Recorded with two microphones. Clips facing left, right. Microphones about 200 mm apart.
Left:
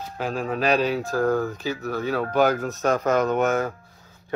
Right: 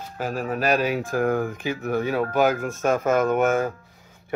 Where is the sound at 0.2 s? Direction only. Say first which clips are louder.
Even; 10° right (ahead or behind).